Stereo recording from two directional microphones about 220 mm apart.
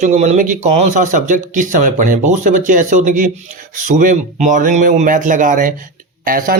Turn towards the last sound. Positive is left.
turn(degrees=-40)  # may be behind; listen again after turning